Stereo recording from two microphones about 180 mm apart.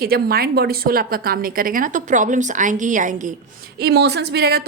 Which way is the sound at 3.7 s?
65° right (ahead or behind).